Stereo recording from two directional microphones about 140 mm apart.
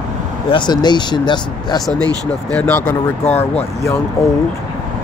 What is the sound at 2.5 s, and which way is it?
Speech, 10° left (ahead or behind).